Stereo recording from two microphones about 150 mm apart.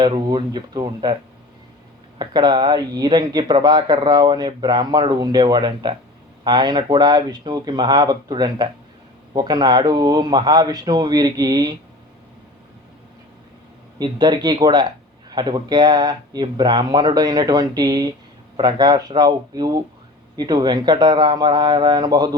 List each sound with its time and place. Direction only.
0.0 s speech: 30° right (ahead or behind)
2.1 s speech: 30° right (ahead or behind)
14.0 s speech: 30° right (ahead or behind)